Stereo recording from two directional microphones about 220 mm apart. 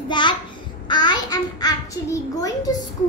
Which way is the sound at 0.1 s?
20° left (ahead or behind).